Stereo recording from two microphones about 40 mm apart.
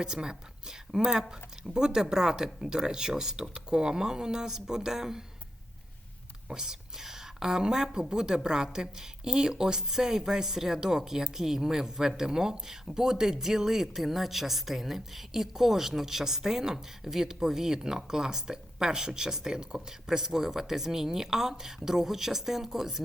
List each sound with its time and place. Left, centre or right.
0.0 s speech: centre
6.5 s speech: centre